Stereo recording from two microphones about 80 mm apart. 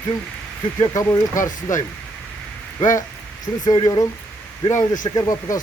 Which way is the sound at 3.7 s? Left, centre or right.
Left.